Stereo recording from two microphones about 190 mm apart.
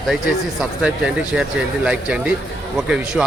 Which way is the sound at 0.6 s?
5° right (ahead or behind).